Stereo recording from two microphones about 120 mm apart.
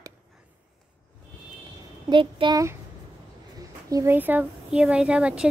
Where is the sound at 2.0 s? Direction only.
40° right (ahead or behind).